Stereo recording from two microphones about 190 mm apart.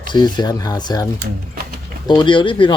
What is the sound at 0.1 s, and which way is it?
Speech, 20° left (ahead or behind).